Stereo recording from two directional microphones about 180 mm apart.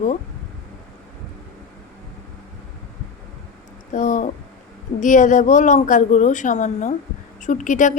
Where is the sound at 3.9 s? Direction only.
45° left (ahead or behind).